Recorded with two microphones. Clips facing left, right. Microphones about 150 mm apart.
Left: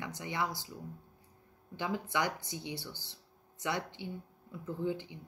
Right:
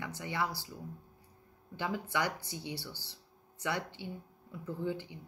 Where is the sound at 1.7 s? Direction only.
20° left (ahead or behind).